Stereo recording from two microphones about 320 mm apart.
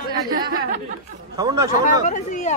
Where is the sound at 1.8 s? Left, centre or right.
Left.